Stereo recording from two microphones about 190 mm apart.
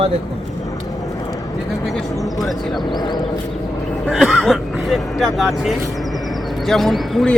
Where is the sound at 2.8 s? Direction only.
25° left (ahead or behind).